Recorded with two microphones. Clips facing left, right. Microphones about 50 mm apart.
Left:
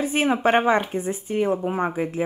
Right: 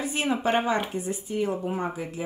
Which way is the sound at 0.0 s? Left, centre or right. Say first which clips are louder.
Left 6 dB; left.